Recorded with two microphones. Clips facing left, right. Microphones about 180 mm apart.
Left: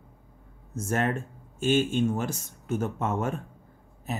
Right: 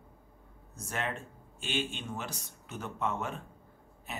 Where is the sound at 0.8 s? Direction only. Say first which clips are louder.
Left 9 dB; 45° left (ahead or behind).